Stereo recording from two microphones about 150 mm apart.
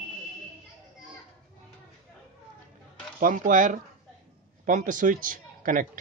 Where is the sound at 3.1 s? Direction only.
65° right (ahead or behind).